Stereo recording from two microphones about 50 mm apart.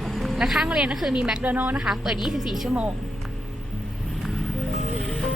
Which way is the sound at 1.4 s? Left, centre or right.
Right.